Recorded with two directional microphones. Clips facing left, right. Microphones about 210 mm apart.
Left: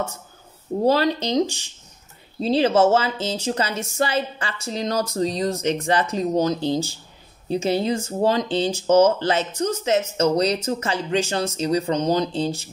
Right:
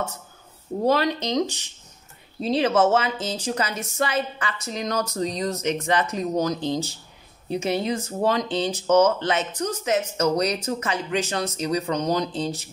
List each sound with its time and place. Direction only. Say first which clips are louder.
0.8 s speech: left 2 dB; 30° left (ahead or behind)